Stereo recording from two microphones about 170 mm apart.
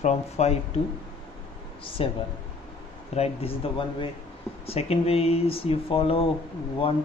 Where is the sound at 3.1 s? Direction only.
35° left (ahead or behind).